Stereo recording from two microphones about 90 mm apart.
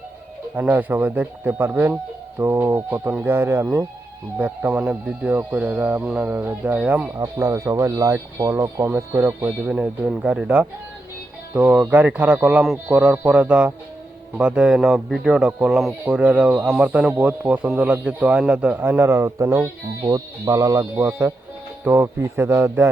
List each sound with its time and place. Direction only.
0.5 s speech: 20° right (ahead or behind)
7.3 s speech: 35° right (ahead or behind)
9.6 s speech: 10° right (ahead or behind)
16.0 s speech: 15° right (ahead or behind); by 20.8 s 40° right (ahead or behind)
20.9 s speech: 25° right (ahead or behind)